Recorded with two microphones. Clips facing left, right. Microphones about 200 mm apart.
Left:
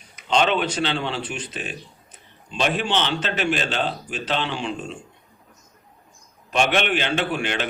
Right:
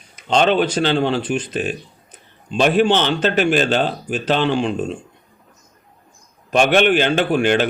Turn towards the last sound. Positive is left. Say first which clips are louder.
# right 9 dB
turn(degrees=-45)  # may be behind; listen again after turning